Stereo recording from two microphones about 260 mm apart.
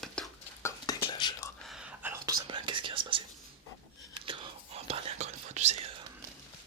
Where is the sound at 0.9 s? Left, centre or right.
Centre.